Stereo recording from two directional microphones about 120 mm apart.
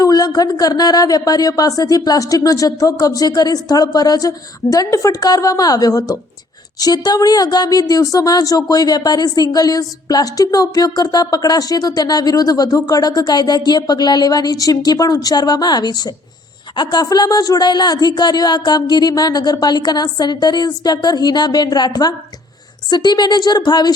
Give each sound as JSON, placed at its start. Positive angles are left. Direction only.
{"t": 0.0, "sound": "speech", "side_deg": 30}